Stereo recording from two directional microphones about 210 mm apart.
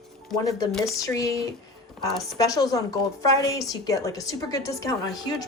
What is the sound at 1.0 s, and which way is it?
A woman's voice, 15° left (ahead or behind).